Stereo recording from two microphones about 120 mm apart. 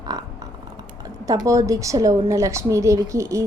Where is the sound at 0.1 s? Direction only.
30° right (ahead or behind).